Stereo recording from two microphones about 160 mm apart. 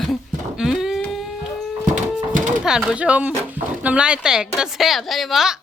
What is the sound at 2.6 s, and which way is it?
Speech, 5° right (ahead or behind).